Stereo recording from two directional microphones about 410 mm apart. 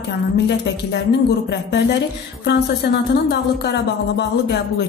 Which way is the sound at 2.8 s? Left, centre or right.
Left.